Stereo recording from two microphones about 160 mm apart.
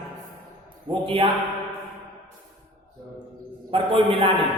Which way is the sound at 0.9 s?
30° right (ahead or behind).